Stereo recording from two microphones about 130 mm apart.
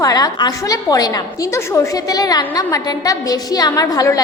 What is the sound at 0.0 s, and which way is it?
A woman's voice, 30° left (ahead or behind).